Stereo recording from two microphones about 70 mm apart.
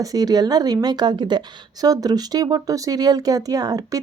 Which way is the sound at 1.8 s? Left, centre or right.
Right.